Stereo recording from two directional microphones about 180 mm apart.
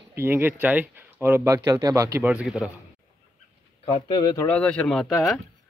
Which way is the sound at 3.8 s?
25° left (ahead or behind).